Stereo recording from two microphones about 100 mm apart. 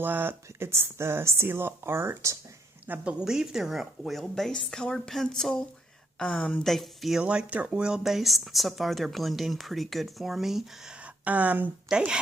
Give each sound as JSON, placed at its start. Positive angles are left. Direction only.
{"t": 0.0, "sound": "speech", "side_deg": -20}
{"t": 2.8, "sound": "speech", "side_deg": -15}
{"t": 7.2, "sound": "speech", "side_deg": -10}
{"t": 11.0, "sound": "speech", "side_deg": -15}